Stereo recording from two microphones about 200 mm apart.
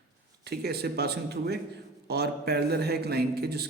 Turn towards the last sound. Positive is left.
turn(degrees=-55)  # may be behind; listen again after turning